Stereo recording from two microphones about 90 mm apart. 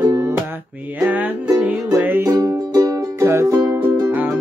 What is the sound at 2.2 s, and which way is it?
Music, 45° right (ahead or behind).